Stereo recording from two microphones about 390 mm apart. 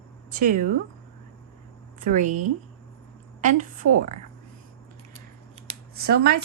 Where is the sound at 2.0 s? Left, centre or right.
Centre.